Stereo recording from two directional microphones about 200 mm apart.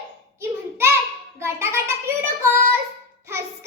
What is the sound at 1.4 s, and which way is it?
Child singing, 10° right (ahead or behind).